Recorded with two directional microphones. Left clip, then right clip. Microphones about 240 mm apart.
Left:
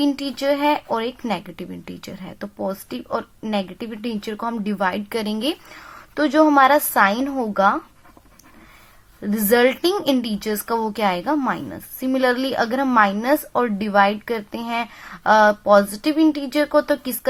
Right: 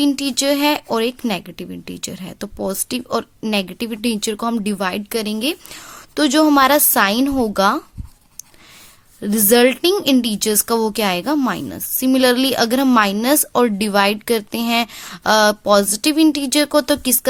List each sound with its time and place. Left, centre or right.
0.0 s speech: right
9.2 s speech: right